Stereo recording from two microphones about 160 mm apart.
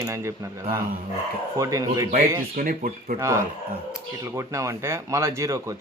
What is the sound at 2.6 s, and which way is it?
Speech, 60° right (ahead or behind).